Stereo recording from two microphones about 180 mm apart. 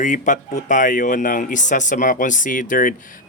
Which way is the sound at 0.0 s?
45° left (ahead or behind).